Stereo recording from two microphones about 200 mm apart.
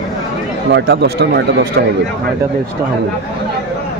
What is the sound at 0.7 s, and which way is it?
Speech, 55° right (ahead or behind).